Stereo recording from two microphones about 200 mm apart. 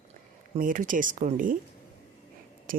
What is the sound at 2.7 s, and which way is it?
Speech, 45° right (ahead or behind).